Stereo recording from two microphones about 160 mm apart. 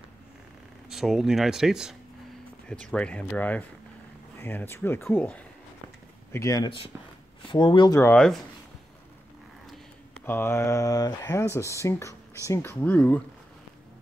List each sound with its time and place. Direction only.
0.8 s speech: centre (ahead or behind)
6.3 s speech: 20° left (ahead or behind)
8.0 s speech: 5° left (ahead or behind)
10.2 s speech: 15° left (ahead or behind)